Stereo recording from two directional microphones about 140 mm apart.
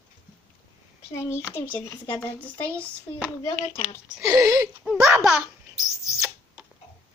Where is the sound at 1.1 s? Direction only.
20° left (ahead or behind).